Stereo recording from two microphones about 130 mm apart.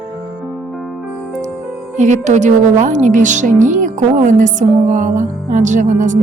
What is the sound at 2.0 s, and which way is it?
A woman's voice, 65° right (ahead or behind).